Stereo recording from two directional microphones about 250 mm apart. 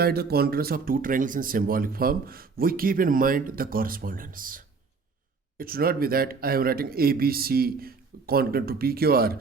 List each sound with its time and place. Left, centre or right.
0.0 s speech: right